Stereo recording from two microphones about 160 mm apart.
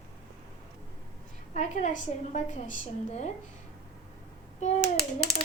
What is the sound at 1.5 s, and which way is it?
A woman's voice, 45° left (ahead or behind).